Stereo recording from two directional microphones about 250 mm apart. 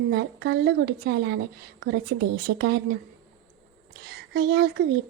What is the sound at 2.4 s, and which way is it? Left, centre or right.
Speech, right.